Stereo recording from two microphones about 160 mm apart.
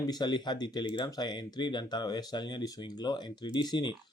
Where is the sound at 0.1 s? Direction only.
25° left (ahead or behind).